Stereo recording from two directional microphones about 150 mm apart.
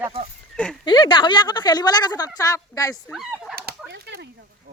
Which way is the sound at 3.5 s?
85° right.